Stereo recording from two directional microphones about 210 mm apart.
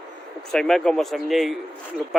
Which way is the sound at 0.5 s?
Centre (ahead or behind).